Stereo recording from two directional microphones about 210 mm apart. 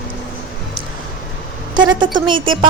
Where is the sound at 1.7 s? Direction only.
20° right (ahead or behind).